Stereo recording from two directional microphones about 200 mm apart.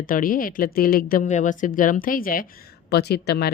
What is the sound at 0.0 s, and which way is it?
Speech, 45° left (ahead or behind).